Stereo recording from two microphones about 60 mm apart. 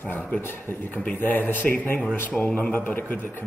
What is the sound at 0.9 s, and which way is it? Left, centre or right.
A man's voice, left.